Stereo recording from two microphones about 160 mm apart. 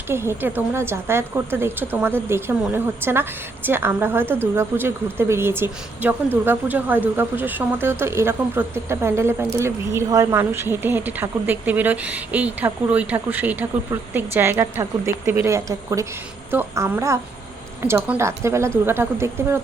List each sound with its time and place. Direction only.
0.1 s speech: 15° right (ahead or behind)